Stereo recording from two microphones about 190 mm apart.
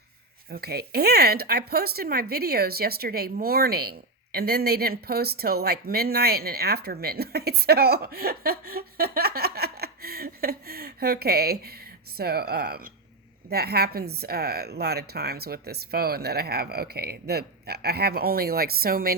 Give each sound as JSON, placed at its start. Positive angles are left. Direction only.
{"t": 0.5, "sound": "speech", "side_deg": -55}